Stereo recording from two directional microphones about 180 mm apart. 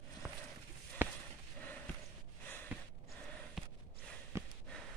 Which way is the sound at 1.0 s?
10° right (ahead or behind).